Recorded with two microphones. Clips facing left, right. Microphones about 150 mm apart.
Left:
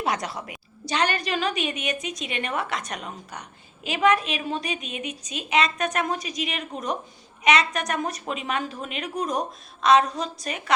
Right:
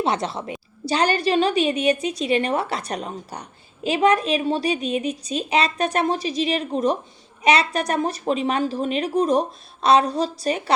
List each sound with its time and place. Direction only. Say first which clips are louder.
0.0 s a woman's voice: right 4 dB; 25° right (ahead or behind)